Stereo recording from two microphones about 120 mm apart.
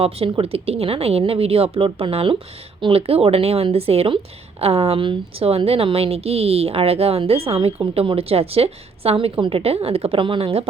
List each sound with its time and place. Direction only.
0.0 s a woman's voice: 50° right (ahead or behind)